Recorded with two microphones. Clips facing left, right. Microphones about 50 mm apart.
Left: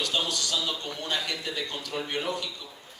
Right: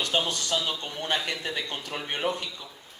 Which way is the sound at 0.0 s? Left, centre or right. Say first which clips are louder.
Right 2 dB; right.